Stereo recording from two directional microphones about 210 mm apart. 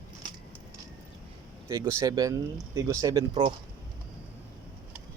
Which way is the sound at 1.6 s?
15° right (ahead or behind).